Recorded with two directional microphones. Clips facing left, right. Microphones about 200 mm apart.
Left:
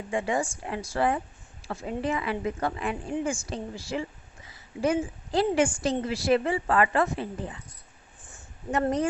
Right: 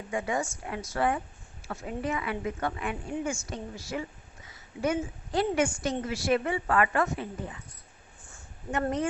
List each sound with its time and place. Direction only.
0.1 s a woman's voice: 30° left (ahead or behind)
8.7 s a woman's voice: 35° left (ahead or behind)